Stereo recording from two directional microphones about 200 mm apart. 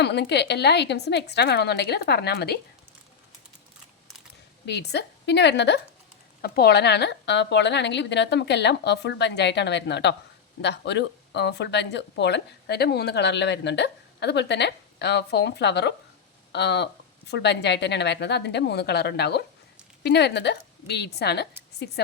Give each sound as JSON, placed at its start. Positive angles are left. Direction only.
{"t": 0.0, "sound": "speech", "side_deg": 55}
{"t": 4.6, "sound": "speech", "side_deg": 55}